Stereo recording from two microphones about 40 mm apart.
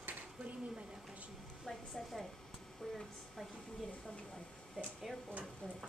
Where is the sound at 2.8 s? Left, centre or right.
Centre.